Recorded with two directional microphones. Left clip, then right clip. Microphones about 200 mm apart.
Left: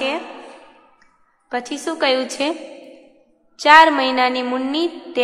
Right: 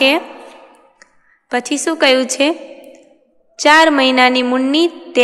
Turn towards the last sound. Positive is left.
turn(degrees=-35)  # may be behind; listen again after turning